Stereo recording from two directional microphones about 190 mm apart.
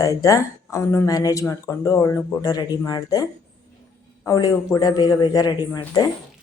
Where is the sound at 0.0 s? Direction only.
15° left (ahead or behind).